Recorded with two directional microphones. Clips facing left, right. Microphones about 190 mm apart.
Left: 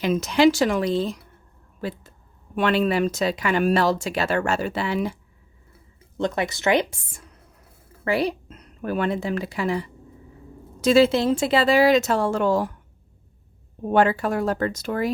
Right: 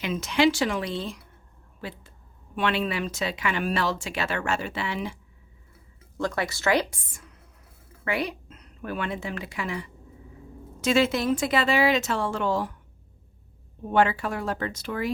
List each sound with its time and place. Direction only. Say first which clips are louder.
0.0 s speech: left 5 dB; 40° left (ahead or behind)
6.1 s speech: left 4 dB; 20° left (ahead or behind)
8.0 s speech: left 6 dB; 35° left (ahead or behind)
13.8 s speech: left 4 dB; 40° left (ahead or behind)